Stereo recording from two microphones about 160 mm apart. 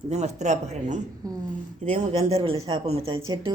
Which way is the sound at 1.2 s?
25° right (ahead or behind).